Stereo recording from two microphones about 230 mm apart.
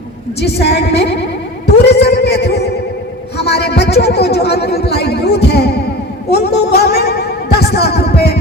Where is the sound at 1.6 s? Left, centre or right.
Left.